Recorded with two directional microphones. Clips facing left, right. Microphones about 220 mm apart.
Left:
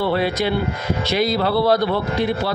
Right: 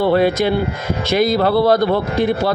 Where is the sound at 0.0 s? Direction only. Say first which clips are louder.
Right 5 dB; 50° right (ahead or behind).